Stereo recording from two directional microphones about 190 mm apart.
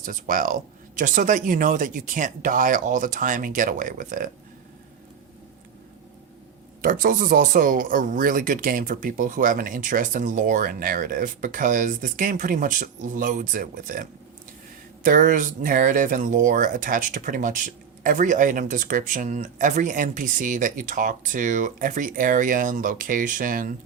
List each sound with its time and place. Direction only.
0.0 s speech: 45° right (ahead or behind)
6.8 s speech: 45° right (ahead or behind)